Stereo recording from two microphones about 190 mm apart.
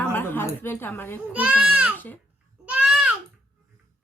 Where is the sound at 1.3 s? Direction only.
5° right (ahead or behind).